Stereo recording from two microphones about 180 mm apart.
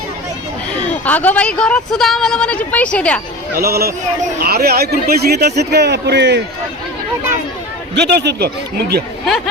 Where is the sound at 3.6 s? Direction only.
60° right (ahead or behind); by 6.4 s 75° right (ahead or behind).